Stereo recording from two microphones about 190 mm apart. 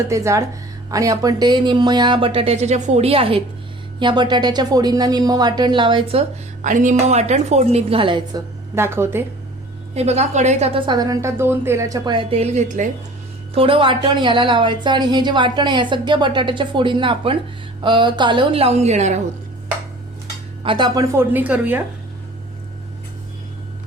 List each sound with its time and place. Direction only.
0.1 s a woman's voice: 15° right (ahead or behind)
8.7 s a woman's voice: 15° right (ahead or behind)
9.9 s speech: 35° right (ahead or behind)
13.5 s a woman's voice: 30° right (ahead or behind)
20.7 s a woman's voice: 25° right (ahead or behind); by 21.8 s 10° right (ahead or behind)